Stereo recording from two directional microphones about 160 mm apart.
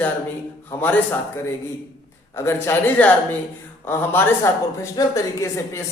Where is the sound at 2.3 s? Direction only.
15° left (ahead or behind).